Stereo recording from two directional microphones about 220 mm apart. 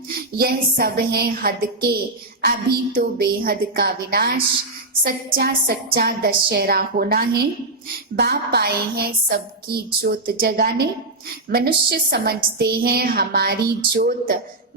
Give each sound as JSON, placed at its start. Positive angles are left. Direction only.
{"t": 0.3, "sound": "a woman's voice", "side_deg": -45}